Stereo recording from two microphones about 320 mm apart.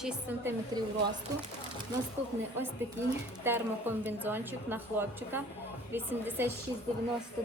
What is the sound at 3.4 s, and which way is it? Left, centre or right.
A woman's voice, centre.